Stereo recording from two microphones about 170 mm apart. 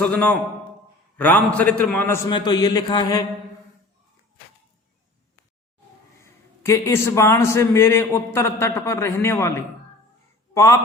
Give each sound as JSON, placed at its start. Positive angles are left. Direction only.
{"t": 0.0, "sound": "a man's voice", "side_deg": 10}
{"t": 2.3, "sound": "mantra", "side_deg": 25}
{"t": 6.1, "sound": "a man's voice", "side_deg": 15}